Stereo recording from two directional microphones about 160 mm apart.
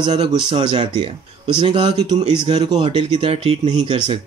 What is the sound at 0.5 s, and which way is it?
Speech, 30° right (ahead or behind).